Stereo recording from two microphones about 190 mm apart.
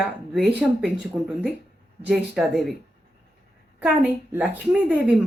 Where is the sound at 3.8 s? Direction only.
5° right (ahead or behind).